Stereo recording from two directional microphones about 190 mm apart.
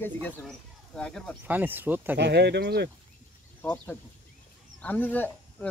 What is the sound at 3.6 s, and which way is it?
Speech, 10° left (ahead or behind).